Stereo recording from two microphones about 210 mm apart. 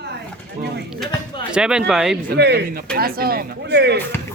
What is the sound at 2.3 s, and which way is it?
Speech, 55° right (ahead or behind).